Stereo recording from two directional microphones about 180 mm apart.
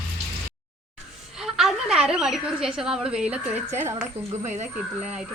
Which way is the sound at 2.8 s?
5° right (ahead or behind).